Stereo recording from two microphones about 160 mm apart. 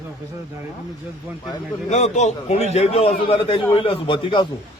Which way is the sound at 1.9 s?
45° left (ahead or behind).